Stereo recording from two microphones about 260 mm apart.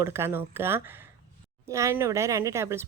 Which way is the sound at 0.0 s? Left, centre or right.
Centre.